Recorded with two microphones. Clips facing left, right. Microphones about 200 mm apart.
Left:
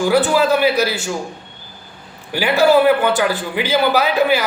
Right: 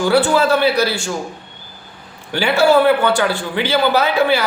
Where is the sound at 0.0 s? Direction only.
15° left (ahead or behind).